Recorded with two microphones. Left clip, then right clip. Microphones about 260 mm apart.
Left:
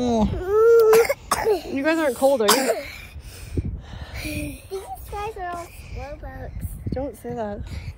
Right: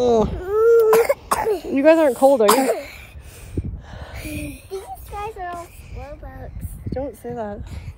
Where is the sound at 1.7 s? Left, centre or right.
Right.